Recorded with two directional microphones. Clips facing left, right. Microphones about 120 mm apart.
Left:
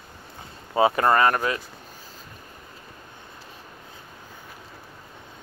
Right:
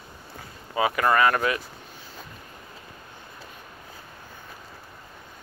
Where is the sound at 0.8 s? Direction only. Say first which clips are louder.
Left 2 dB; 30° left (ahead or behind).